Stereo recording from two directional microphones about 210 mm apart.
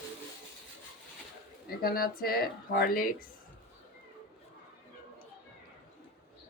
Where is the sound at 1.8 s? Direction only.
45° left (ahead or behind).